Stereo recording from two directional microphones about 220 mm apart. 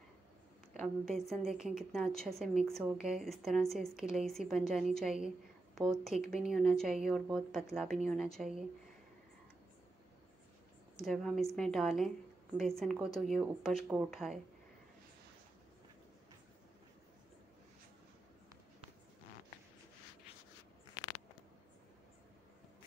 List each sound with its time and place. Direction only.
0.7 s a woman's voice: centre (ahead or behind)
11.1 s a woman's voice: centre (ahead or behind)